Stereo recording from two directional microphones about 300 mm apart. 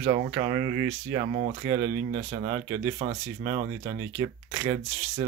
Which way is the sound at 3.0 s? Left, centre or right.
Centre.